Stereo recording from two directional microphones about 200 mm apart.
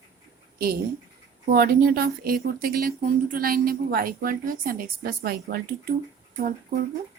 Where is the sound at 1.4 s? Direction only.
50° right (ahead or behind).